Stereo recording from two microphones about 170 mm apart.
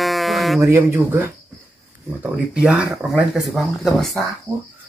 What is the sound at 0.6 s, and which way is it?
Speech, 15° right (ahead or behind).